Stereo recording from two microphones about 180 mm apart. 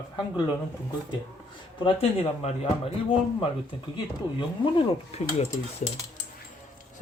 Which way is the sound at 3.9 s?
30° left (ahead or behind).